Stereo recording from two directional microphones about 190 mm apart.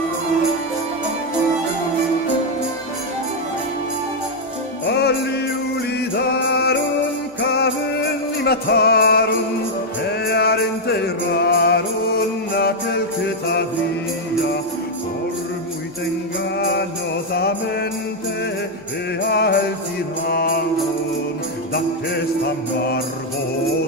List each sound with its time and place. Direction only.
4.9 s music: 60° left (ahead or behind)
16.6 s music: 60° left (ahead or behind)
19.2 s music: 60° left (ahead or behind)
21.7 s music: 55° left (ahead or behind)